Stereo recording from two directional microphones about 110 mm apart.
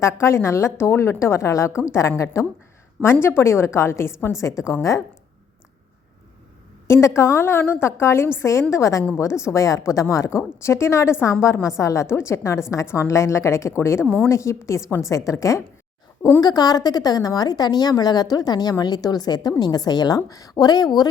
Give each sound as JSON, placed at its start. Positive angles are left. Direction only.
{"t": 0.0, "sound": "a woman's voice", "side_deg": 25}
{"t": 6.8, "sound": "a woman's voice", "side_deg": 25}